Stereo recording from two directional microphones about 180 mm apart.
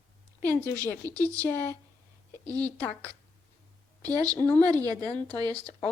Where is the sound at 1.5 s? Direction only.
10° left (ahead or behind).